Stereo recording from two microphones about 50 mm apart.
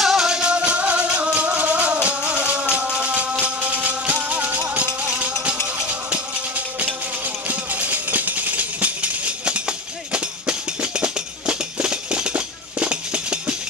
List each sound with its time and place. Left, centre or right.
0.0 s music: centre; by 6.2 s right
7.4 s music: right